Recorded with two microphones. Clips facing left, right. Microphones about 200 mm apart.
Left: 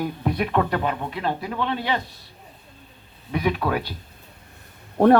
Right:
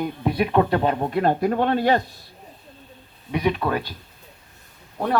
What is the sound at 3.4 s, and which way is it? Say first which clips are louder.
Speech: right 1 dB; centre (ahead or behind).